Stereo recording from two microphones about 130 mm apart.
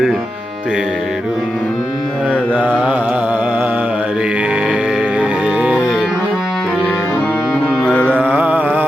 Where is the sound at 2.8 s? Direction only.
10° right (ahead or behind).